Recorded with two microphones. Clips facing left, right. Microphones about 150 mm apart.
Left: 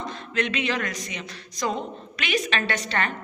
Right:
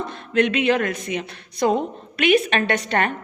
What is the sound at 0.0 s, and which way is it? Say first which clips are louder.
A woman's voice: right 7 dB; 55° right (ahead or behind).